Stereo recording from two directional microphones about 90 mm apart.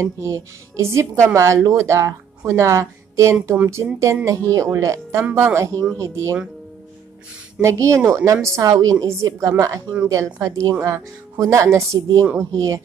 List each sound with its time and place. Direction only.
0.0 s speech: 30° right (ahead or behind)
7.6 s speech: 35° right (ahead or behind)